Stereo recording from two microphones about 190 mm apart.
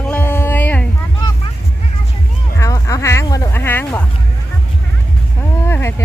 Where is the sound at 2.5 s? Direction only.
15° left (ahead or behind).